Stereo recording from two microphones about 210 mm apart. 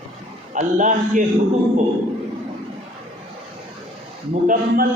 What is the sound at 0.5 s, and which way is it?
Speech, 35° right (ahead or behind).